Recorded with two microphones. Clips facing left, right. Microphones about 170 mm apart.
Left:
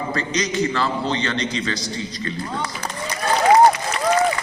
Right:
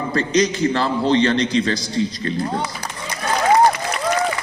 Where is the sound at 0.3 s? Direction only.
30° right (ahead or behind).